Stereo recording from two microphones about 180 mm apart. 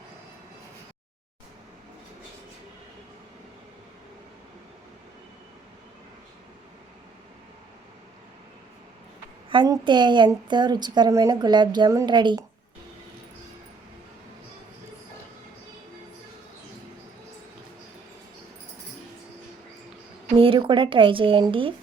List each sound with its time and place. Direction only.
9.5 s a woman's voice: 25° right (ahead or behind)
20.4 s speech: 30° right (ahead or behind)